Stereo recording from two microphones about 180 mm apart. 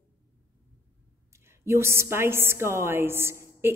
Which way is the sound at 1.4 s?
15° right (ahead or behind).